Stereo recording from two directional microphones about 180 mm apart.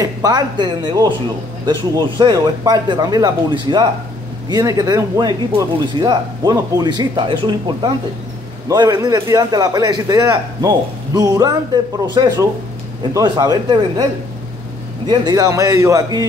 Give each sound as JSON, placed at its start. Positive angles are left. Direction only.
{"t": 0.0, "sound": "a man's voice", "side_deg": -20}
{"t": 15.0, "sound": "a man's voice", "side_deg": -20}